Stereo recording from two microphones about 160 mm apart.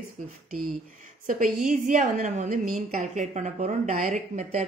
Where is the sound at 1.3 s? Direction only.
55° right (ahead or behind).